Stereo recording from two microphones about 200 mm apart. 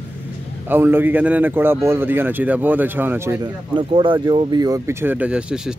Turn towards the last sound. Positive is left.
turn(degrees=-5)  # may be behind; listen again after turning